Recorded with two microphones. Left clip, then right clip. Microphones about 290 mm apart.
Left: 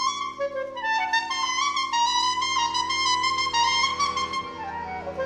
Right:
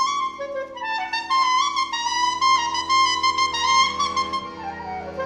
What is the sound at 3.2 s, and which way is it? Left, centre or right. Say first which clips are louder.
Music: right 2 dB; right.